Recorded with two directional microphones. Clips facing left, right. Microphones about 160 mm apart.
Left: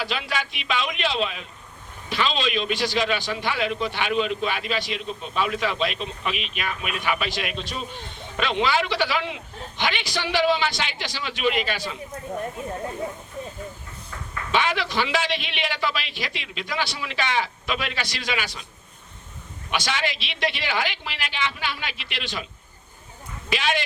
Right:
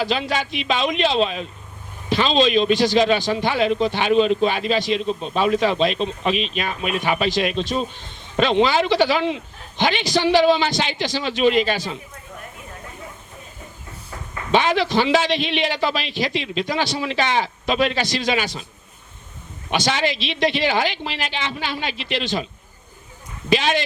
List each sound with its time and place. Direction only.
0.0 s a man's voice: 30° right (ahead or behind)
14.1 s a sound: 30° right (ahead or behind)
14.8 s a man's voice: 30° right (ahead or behind)
19.8 s a man's voice: 35° right (ahead or behind)
23.5 s a man's voice: 35° right (ahead or behind)